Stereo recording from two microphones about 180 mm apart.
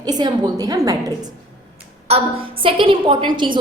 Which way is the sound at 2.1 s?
35° right (ahead or behind).